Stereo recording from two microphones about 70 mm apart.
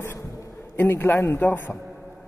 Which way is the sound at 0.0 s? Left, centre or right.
Left.